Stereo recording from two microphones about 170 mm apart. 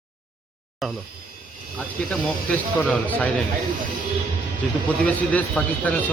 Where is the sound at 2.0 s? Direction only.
10° left (ahead or behind).